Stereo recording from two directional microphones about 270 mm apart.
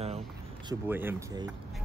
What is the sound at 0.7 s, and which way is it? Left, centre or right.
Speech, centre.